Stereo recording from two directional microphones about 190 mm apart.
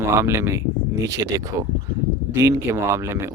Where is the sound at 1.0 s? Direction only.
70° right (ahead or behind).